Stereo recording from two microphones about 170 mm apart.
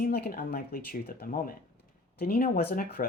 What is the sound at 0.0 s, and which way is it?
Speech, 60° left (ahead or behind).